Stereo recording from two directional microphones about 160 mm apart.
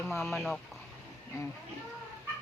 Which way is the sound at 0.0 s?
Centre (ahead or behind).